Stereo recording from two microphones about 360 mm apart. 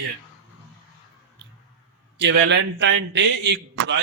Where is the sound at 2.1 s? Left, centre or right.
Right.